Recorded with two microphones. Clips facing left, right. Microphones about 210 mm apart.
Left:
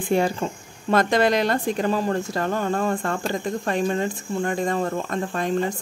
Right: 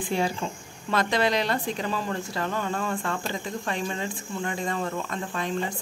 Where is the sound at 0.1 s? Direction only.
50° left (ahead or behind).